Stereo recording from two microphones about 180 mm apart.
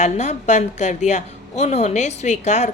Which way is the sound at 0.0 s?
40° left (ahead or behind).